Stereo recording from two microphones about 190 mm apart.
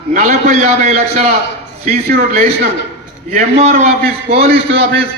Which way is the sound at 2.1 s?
55° right (ahead or behind).